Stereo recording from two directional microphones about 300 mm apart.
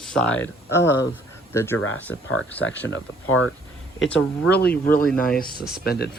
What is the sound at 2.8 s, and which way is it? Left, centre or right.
Speech, left.